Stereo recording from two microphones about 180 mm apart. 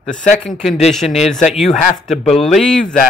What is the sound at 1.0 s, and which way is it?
Speech, 35° left (ahead or behind).